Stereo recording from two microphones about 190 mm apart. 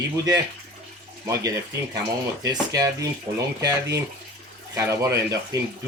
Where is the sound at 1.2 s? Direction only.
15° right (ahead or behind).